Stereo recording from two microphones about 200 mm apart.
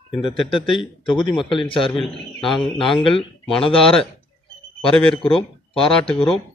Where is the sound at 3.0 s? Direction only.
25° left (ahead or behind).